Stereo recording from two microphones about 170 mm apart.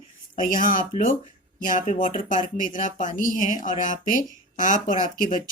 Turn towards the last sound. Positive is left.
turn(degrees=50)  # may be behind; listen again after turning